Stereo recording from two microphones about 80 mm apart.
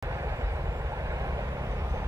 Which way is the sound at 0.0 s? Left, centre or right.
Right.